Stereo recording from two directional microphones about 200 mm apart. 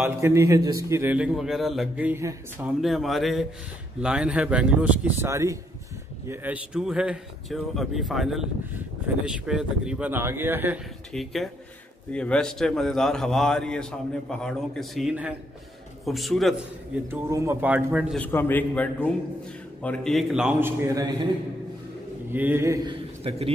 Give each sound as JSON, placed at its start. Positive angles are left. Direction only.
{"t": 0.0, "sound": "a man's voice", "side_deg": -15}
{"t": 11.1, "sound": "speech", "side_deg": 0}
{"t": 17.1, "sound": "a man's voice", "side_deg": -15}
{"t": 18.1, "sound": "a man's voice", "side_deg": 10}
{"t": 22.3, "sound": "a man's voice", "side_deg": -10}
{"t": 23.3, "sound": "speech", "side_deg": -30}